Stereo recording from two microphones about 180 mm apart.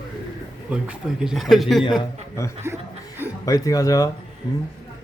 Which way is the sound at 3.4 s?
20° left (ahead or behind).